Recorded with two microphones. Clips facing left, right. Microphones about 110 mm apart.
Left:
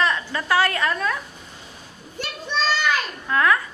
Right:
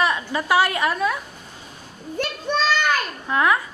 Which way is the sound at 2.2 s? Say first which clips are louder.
Right 3 dB; 50° right (ahead or behind).